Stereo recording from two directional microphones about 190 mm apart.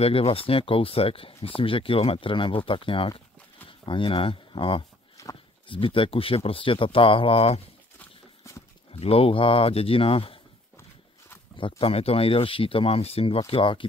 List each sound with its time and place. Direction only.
0.0 s speech: 30° left (ahead or behind)
8.0 s horse: 15° left (ahead or behind)
8.9 s speech: 30° left (ahead or behind)
11.5 s speech: 30° left (ahead or behind)